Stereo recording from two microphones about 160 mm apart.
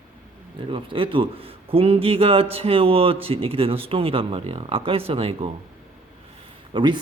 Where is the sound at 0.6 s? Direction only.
35° right (ahead or behind).